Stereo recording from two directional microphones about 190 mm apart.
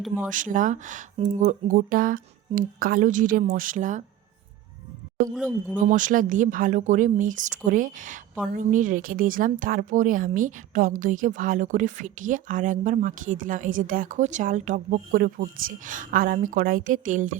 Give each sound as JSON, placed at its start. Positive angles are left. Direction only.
{"t": 0.2, "sound": "speech", "side_deg": -45}
{"t": 5.3, "sound": "speech", "side_deg": -10}
{"t": 5.9, "sound": "speech", "side_deg": -45}